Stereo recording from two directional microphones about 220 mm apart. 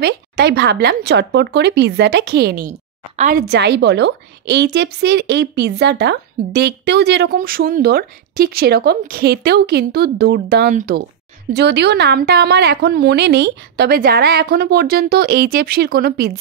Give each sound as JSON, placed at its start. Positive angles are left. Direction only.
{"t": 0.0, "sound": "a woman's voice", "side_deg": -50}
{"t": 11.5, "sound": "a woman's voice", "side_deg": -50}